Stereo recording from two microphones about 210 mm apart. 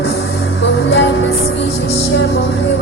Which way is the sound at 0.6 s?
60° left (ahead or behind).